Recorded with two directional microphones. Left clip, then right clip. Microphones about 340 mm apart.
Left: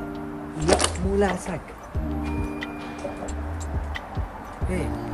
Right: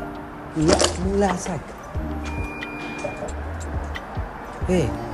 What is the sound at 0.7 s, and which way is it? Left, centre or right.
Speech, left.